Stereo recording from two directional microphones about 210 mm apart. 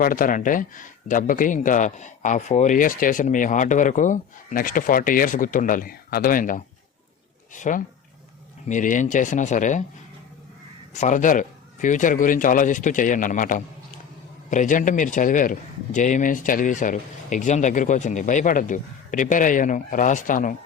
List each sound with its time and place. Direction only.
0.0 s speech: 40° left (ahead or behind)
10.9 s speech: 35° left (ahead or behind)